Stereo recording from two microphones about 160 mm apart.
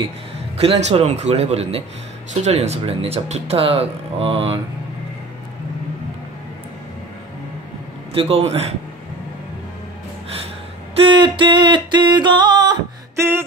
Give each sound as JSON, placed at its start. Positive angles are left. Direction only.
{"t": 0.6, "sound": "speech", "side_deg": -40}
{"t": 8.1, "sound": "speech", "side_deg": -35}
{"t": 11.0, "sound": "music", "side_deg": -30}